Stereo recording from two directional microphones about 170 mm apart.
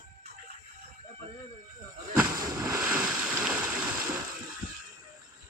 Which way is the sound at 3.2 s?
5° right (ahead or behind).